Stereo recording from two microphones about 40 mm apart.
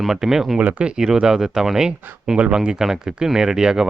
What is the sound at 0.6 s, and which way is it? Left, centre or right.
Speech, right.